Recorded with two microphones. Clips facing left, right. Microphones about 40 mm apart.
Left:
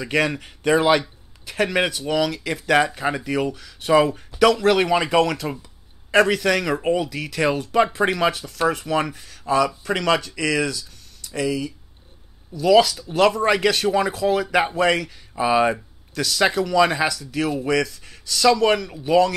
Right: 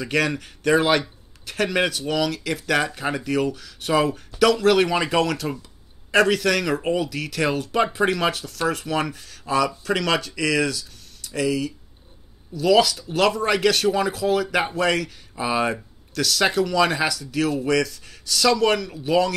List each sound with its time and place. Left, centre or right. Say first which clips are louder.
0.0 s speech: left 1 dB; centre